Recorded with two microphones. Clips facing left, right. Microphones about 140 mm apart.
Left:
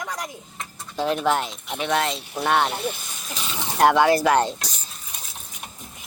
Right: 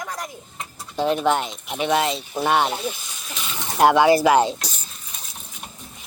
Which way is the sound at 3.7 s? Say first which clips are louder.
Right 2 dB; centre (ahead or behind).